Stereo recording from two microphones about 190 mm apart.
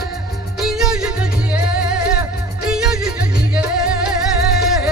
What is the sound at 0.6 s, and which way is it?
Music, 5° right (ahead or behind).